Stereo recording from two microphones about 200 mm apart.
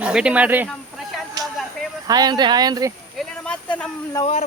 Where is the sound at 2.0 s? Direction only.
20° right (ahead or behind).